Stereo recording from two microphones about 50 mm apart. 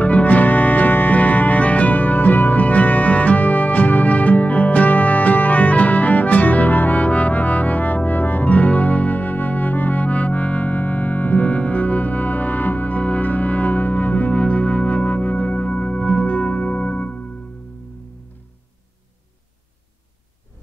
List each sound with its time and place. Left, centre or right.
0.0 s music: left